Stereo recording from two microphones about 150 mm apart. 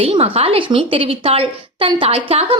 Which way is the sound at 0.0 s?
40° right (ahead or behind).